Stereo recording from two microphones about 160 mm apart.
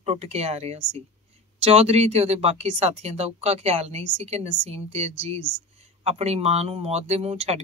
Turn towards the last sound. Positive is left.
turn(degrees=-40)  # may be behind; listen again after turning